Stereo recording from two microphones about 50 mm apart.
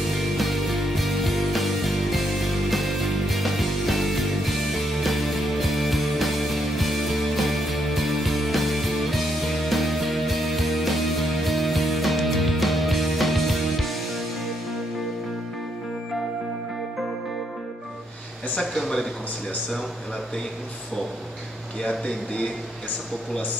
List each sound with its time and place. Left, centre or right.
0.2 s music: centre
18.6 s speech: centre
21.8 s speech: left